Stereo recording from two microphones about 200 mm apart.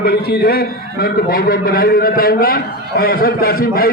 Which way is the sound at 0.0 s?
50° left (ahead or behind).